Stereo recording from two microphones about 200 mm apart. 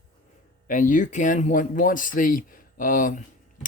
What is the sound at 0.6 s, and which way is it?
A man's voice, 40° left (ahead or behind).